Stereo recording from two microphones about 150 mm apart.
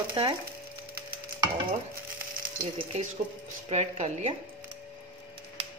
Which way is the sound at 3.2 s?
50° right (ahead or behind).